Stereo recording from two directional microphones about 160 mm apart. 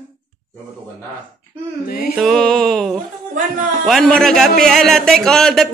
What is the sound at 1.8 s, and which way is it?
Music, 75° left (ahead or behind).